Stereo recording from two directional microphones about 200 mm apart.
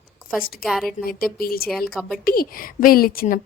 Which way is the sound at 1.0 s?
50° left (ahead or behind).